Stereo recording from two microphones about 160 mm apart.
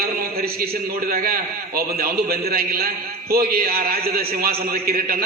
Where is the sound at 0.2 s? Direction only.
70° right (ahead or behind).